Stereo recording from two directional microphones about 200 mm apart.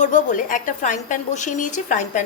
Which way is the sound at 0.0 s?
40° left (ahead or behind).